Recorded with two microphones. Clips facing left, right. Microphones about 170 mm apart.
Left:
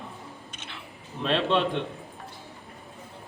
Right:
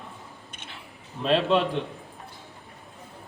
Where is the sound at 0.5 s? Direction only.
55° right (ahead or behind).